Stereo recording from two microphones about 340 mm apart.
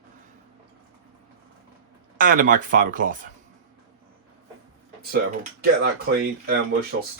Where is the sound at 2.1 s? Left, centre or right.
Right.